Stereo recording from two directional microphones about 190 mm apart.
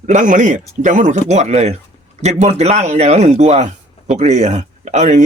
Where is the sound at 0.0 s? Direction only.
40° right (ahead or behind).